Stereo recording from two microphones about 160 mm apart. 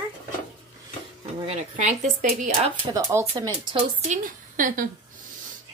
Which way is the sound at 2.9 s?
15° right (ahead or behind).